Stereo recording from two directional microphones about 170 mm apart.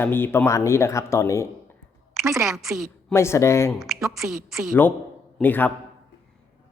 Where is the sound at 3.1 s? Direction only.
15° left (ahead or behind).